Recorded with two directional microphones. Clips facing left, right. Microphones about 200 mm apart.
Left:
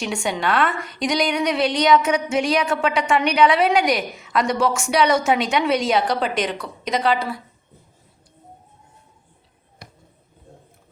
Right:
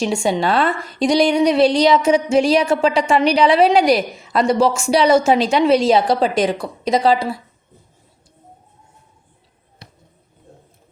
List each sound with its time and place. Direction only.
0.0 s a woman's voice: 30° right (ahead or behind)